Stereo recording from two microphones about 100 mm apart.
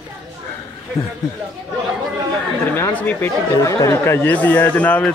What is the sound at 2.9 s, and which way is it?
Speech, 15° left (ahead or behind).